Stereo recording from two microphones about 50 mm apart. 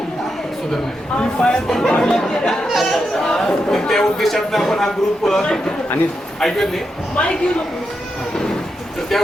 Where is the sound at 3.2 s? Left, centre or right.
Centre.